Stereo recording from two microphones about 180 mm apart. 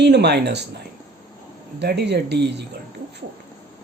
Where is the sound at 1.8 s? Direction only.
65° right (ahead or behind).